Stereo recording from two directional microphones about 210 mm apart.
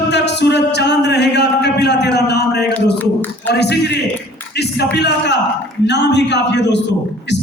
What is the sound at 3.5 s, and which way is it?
Music, 50° left (ahead or behind).